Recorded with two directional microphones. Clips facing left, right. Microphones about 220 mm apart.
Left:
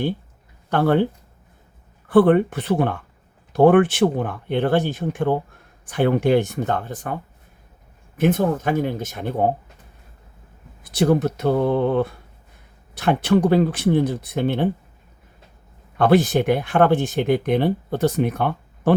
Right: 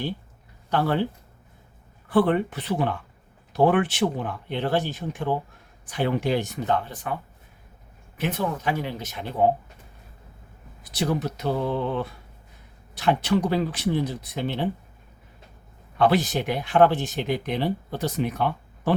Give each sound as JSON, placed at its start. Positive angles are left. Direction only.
{"t": 0.7, "sound": "speech", "side_deg": 55}
{"t": 2.0, "sound": "speech", "side_deg": 50}
{"t": 8.2, "sound": "speech", "side_deg": 50}
{"t": 10.9, "sound": "speech", "side_deg": 50}
{"t": 16.0, "sound": "speech", "side_deg": 50}